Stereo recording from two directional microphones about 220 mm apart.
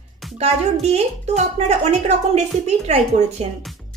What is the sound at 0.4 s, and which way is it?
Speech, 30° right (ahead or behind).